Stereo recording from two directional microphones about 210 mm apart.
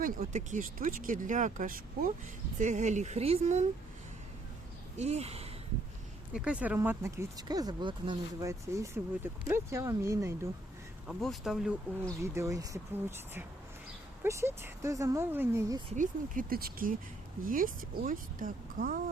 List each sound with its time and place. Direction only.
0.0 s speech: 40° right (ahead or behind)
4.9 s speech: 30° right (ahead or behind)
6.3 s speech: 5° right (ahead or behind)
11.0 s speech: centre (ahead or behind)
12.2 s speech: 15° right (ahead or behind)
16.0 s speech: 40° right (ahead or behind)